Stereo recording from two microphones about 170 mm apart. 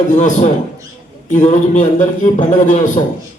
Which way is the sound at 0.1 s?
45° left (ahead or behind).